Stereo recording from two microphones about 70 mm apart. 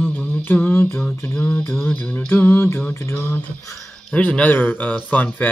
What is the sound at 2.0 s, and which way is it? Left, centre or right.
Speech, left.